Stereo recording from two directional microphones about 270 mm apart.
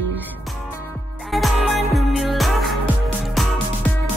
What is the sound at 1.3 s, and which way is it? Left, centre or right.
Music, centre.